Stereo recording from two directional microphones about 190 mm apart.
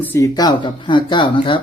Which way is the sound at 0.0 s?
15° left (ahead or behind).